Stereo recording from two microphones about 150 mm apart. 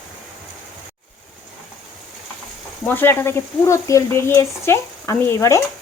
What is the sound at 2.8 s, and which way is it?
Speech, 15° left (ahead or behind).